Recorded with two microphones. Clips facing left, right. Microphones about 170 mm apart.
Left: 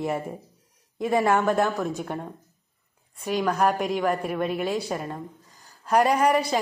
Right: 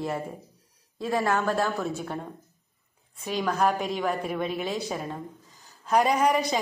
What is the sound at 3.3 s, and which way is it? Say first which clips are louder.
A woman's voice: left 2 dB; 10° left (ahead or behind).